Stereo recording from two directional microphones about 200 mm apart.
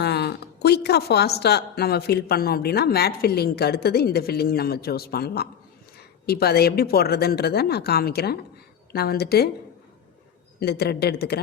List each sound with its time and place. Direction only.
0.0 s a woman's voice: 55° left (ahead or behind)
10.6 s a woman's voice: 50° left (ahead or behind)